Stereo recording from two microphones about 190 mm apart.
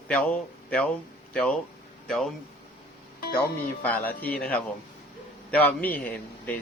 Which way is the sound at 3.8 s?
10° left (ahead or behind).